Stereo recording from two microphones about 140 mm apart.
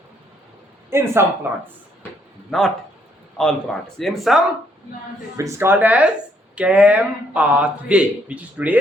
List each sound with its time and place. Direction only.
0.9 s speech: 20° right (ahead or behind)
2.5 s speech: 5° left (ahead or behind)
5.4 s speech: 20° right (ahead or behind)